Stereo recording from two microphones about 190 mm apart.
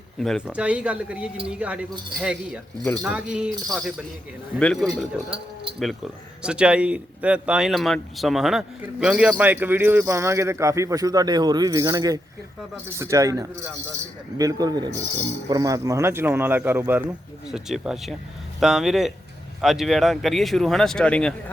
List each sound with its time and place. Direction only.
0.2 s a man's voice: centre (ahead or behind)